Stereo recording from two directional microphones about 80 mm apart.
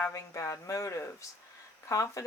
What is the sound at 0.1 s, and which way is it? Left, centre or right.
Speech, left.